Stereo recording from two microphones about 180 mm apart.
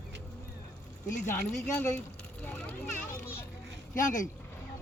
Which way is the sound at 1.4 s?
10° left (ahead or behind).